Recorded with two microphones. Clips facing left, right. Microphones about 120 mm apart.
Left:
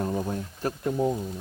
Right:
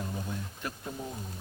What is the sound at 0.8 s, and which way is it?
Speech, 60° left (ahead or behind).